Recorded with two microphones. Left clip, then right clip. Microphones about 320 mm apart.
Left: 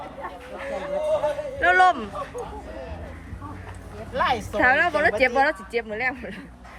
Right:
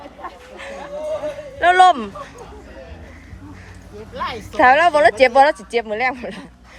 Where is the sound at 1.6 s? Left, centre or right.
Centre.